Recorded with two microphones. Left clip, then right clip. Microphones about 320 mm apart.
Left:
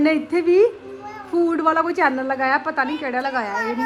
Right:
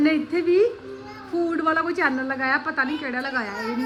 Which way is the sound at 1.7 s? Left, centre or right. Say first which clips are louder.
Left 4 dB; centre.